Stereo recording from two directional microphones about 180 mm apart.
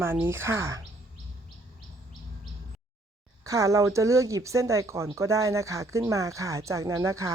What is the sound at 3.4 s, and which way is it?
Speech, 15° right (ahead or behind).